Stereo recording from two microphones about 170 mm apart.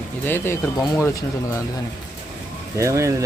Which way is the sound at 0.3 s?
15° left (ahead or behind).